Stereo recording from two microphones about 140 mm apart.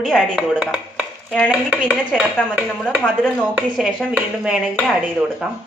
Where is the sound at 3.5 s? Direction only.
10° right (ahead or behind).